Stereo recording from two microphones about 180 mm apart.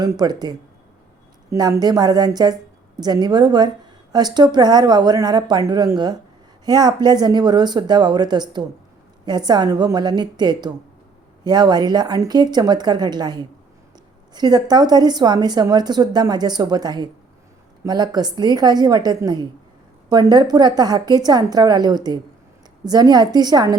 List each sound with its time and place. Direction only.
0.0 s a woman's voice: 20° right (ahead or behind)